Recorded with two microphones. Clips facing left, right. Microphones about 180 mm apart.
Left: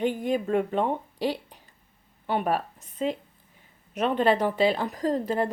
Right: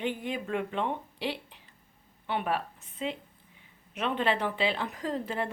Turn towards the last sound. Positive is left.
turn(degrees=40)  # may be behind; listen again after turning